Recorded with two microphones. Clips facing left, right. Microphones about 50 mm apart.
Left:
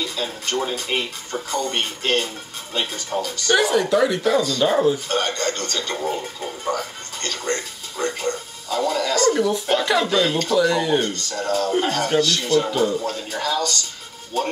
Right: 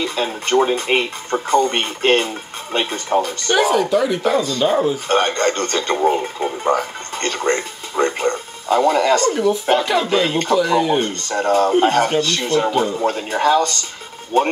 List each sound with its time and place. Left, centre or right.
0.0 s speech: right
3.4 s speech: centre
4.2 s speech: right
4.6 s speech: centre
5.0 s speech: right
9.3 s speech: centre
10.0 s speech: right; by 11.0 s centre
11.0 s speech: right